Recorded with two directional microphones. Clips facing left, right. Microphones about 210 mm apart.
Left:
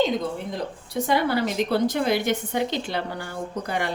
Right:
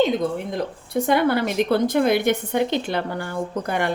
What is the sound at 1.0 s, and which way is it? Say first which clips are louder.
A woman's voice: right 3 dB; 55° right (ahead or behind).